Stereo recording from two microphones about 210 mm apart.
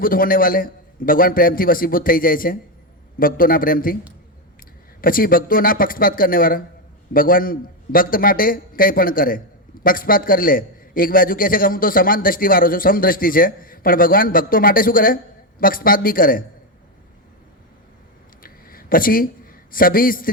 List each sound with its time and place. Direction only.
0.0 s a man's voice: 40° left (ahead or behind)
4.9 s a man's voice: 45° left (ahead or behind)
18.4 s a sound: 45° left (ahead or behind)
19.7 s a man's voice: 45° left (ahead or behind)